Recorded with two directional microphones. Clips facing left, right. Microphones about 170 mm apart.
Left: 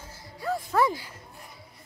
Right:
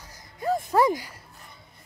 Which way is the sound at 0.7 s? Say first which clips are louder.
Right 3 dB; 15° right (ahead or behind).